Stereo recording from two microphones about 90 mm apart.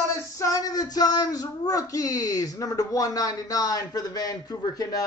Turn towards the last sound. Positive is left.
turn(degrees=50)  # may be behind; listen again after turning